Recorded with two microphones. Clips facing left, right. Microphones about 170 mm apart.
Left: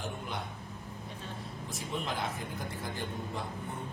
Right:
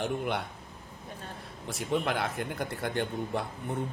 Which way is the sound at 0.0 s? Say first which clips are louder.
Right 8 dB; 70° right (ahead or behind).